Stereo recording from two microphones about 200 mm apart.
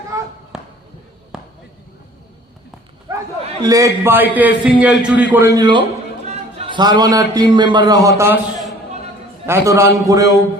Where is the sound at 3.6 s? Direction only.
15° right (ahead or behind).